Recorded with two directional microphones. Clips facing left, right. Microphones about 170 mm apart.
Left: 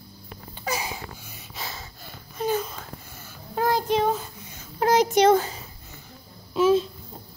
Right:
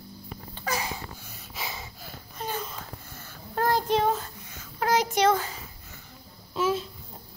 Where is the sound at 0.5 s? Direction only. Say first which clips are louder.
Left 1 dB; 10° left (ahead or behind).